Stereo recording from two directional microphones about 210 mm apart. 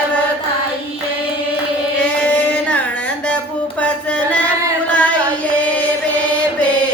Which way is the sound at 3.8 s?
5° left (ahead or behind).